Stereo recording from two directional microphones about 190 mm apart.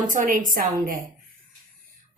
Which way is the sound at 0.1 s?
45° right (ahead or behind).